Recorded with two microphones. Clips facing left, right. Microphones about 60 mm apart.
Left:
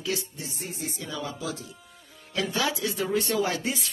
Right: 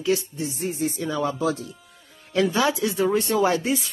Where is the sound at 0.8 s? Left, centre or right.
Right.